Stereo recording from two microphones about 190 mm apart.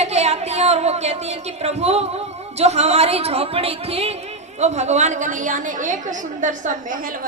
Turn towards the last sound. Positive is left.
turn(degrees=-45)  # may be behind; listen again after turning